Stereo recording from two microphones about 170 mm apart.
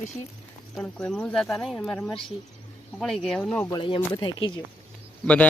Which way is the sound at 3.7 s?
30° left (ahead or behind).